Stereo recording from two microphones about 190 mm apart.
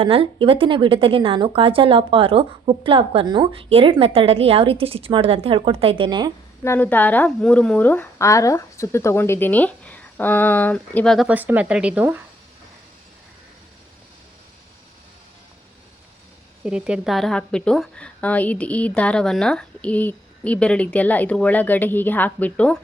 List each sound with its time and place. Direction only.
0.0 s a woman's voice: 30° right (ahead or behind)
6.7 s a woman's voice: 10° left (ahead or behind); by 12.2 s 10° right (ahead or behind)
16.6 s a woman's voice: 5° right (ahead or behind)